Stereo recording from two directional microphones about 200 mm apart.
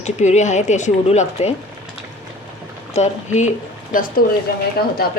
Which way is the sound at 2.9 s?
35° left (ahead or behind).